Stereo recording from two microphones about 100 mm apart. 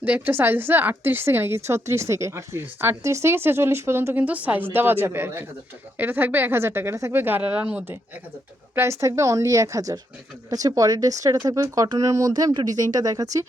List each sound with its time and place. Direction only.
0.0 s a woman's voice: 20° right (ahead or behind)
8.7 s speech: 25° right (ahead or behind)